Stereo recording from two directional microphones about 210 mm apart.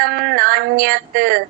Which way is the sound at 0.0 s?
50° right (ahead or behind).